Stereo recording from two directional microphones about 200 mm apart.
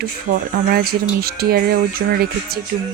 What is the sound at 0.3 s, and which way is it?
Speech, 40° right (ahead or behind).